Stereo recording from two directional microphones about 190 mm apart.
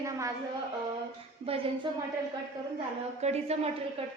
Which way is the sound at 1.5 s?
30° right (ahead or behind).